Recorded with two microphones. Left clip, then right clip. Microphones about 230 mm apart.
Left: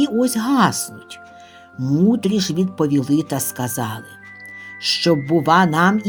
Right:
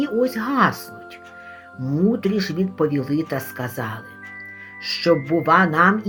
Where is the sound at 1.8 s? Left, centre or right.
Left.